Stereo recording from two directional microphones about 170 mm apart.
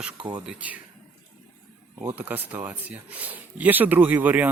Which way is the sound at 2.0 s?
10° right (ahead or behind).